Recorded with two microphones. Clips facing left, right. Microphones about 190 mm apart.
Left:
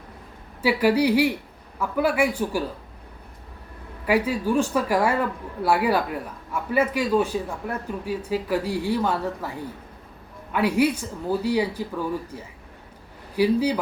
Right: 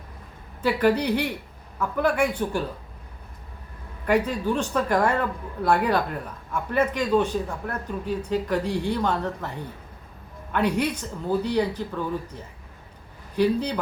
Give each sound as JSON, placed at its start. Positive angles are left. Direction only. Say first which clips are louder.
{"t": 0.6, "sound": "a man's voice", "louder": "left 2 dB", "side_deg": 10}
{"t": 4.0, "sound": "a man's voice", "louder": "even", "side_deg": 5}